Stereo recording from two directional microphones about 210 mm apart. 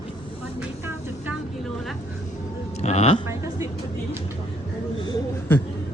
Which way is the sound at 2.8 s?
30° left (ahead or behind).